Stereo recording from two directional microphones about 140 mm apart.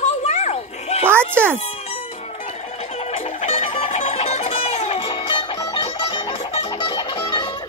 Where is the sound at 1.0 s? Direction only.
15° right (ahead or behind).